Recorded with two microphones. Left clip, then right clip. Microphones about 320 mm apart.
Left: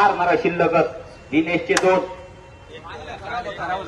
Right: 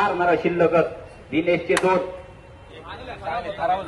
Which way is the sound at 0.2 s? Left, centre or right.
Left.